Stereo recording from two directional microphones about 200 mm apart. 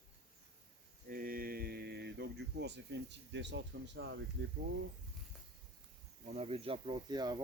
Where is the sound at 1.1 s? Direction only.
45° right (ahead or behind); by 4.2 s 60° right (ahead or behind).